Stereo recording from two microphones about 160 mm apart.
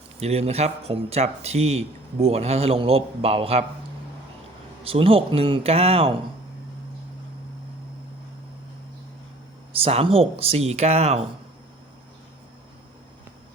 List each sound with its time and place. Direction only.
0.2 s speech: 40° right (ahead or behind)
4.8 s speech: 35° right (ahead or behind)
9.7 s speech: 35° right (ahead or behind)